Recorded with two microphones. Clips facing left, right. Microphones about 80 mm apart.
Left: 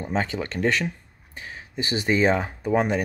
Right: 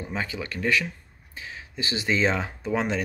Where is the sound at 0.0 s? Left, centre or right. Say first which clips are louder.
Left 5 dB; left.